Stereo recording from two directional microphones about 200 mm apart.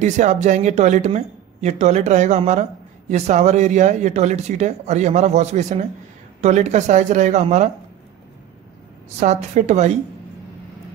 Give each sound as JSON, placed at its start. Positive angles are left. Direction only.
{"t": 0.0, "sound": "speech", "side_deg": -35}
{"t": 9.2, "sound": "speech", "side_deg": -35}